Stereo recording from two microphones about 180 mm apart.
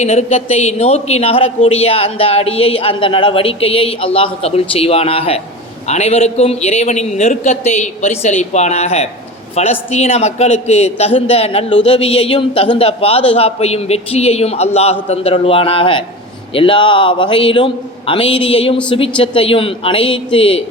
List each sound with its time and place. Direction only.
0.0 s a man's voice: 40° left (ahead or behind)